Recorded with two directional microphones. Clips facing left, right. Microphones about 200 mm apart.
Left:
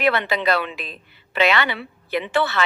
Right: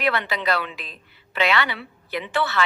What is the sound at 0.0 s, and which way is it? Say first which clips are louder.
A woman's voice: left 4 dB; 25° left (ahead or behind).